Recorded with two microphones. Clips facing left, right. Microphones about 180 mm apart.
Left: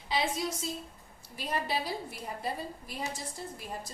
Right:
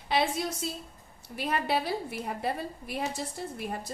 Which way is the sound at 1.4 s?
60° right (ahead or behind).